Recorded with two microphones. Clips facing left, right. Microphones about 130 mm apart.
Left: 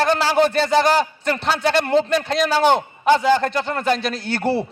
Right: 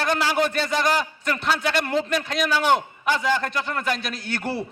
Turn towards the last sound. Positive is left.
turn(degrees=30)  # may be behind; listen again after turning